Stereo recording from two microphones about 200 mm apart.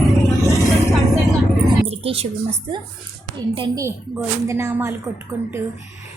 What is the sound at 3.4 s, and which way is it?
A woman's voice, 20° right (ahead or behind).